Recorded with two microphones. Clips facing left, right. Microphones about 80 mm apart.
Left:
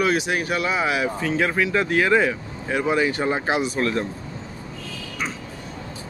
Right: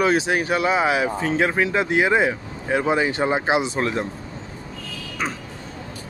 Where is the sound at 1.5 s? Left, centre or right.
Right.